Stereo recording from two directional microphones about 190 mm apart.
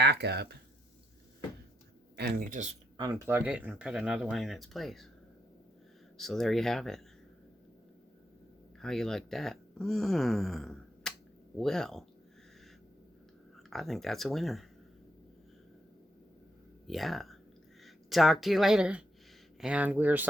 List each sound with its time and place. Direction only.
0.0 s speech: 60° right (ahead or behind)
2.1 s speech: 55° right (ahead or behind)
3.0 s speech: 15° right (ahead or behind)
6.1 s speech: centre (ahead or behind)
8.8 s speech: centre (ahead or behind)
13.7 s speech: centre (ahead or behind)
16.8 s speech: centre (ahead or behind)